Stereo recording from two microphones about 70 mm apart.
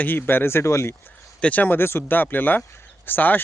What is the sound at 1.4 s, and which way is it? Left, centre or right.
Speech, left.